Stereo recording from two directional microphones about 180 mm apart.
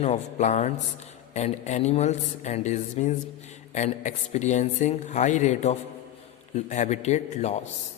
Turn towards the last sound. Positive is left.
turn(degrees=40)  # may be behind; listen again after turning